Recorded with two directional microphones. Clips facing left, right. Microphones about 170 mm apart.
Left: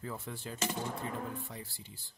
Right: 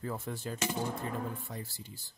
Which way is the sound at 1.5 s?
45° right (ahead or behind).